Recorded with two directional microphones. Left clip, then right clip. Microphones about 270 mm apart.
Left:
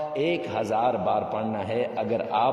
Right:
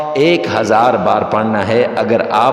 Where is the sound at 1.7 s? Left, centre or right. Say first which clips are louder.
Right 14 dB; right.